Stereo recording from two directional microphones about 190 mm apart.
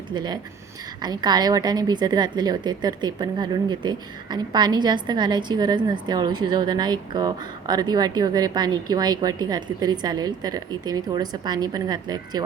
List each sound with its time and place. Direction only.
0.1 s a woman's voice: 25° right (ahead or behind)